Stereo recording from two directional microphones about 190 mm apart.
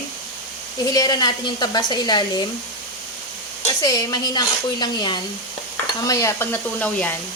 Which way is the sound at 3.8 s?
20° left (ahead or behind).